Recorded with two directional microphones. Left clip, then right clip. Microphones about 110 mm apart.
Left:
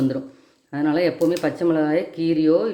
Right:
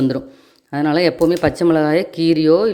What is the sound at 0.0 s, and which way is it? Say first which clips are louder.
Speech: right 4 dB; 60° right (ahead or behind).